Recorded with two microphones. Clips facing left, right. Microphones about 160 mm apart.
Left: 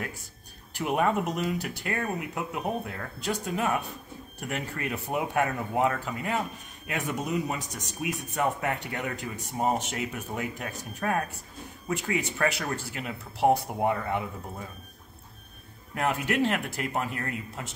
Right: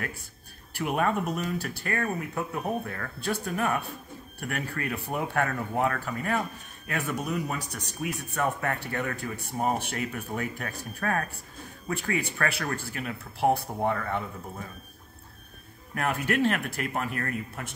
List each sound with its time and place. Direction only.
0.7 s speech: 15° left (ahead or behind)
15.9 s speech: 15° left (ahead or behind)